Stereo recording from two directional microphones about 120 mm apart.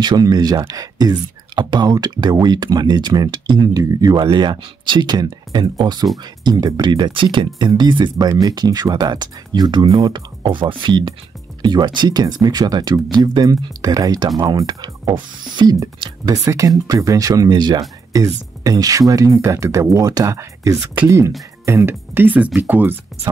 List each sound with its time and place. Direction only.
0.0 s speech: 35° right (ahead or behind); by 22.9 s 15° right (ahead or behind)